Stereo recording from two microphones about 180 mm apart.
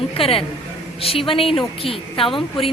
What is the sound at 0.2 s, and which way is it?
A woman's voice, 30° left (ahead or behind).